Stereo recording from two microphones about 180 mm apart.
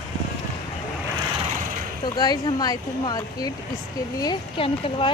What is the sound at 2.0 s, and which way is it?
Speech, 25° left (ahead or behind).